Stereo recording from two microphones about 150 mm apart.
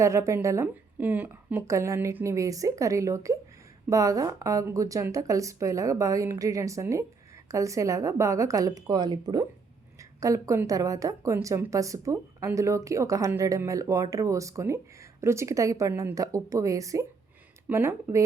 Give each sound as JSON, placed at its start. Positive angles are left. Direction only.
{"t": 0.0, "sound": "a woman's voice", "side_deg": -20}